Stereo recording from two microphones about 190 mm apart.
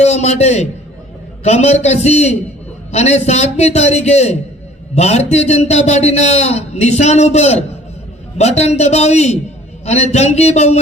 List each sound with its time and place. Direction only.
0.0 s a man's voice: 35° left (ahead or behind)